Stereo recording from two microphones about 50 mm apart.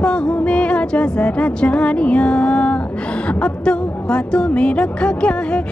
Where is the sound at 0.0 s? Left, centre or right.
Centre.